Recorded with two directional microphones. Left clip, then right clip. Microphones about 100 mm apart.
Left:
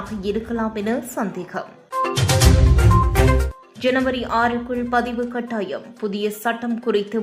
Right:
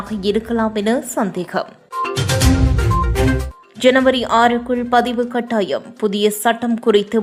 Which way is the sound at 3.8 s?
40° right (ahead or behind).